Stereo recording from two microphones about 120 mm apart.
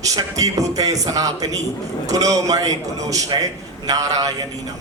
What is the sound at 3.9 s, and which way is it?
Speech, 30° right (ahead or behind).